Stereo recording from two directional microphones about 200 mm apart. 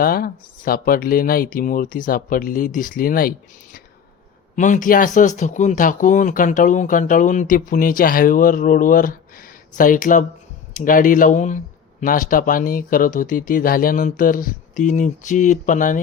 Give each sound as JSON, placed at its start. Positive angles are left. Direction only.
{"t": 0.0, "sound": "speech", "side_deg": 50}